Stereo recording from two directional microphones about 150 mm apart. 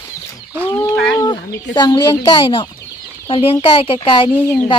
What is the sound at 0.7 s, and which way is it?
Chicken, 30° left (ahead or behind).